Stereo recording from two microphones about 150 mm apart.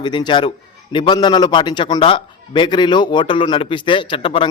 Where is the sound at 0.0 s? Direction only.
30° left (ahead or behind).